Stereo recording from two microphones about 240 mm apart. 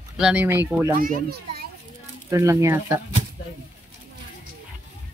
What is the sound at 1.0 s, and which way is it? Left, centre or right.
Speech, right.